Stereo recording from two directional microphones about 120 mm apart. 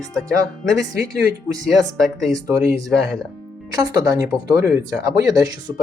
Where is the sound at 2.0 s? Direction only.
5° left (ahead or behind).